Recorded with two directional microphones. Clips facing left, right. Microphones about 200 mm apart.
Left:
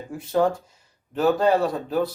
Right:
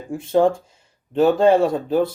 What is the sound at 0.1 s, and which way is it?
Speech, 25° right (ahead or behind).